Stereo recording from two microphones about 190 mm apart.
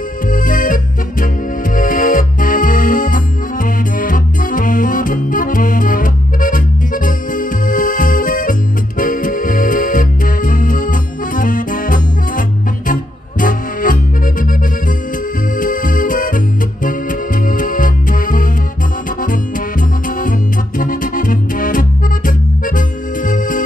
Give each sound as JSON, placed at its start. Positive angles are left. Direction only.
{"t": 0.3, "sound": "music", "side_deg": 45}
{"t": 15.5, "sound": "music", "side_deg": 45}
{"t": 20.2, "sound": "music", "side_deg": 45}